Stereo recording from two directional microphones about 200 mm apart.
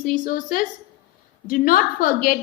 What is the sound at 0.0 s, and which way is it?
A woman's voice, 45° left (ahead or behind).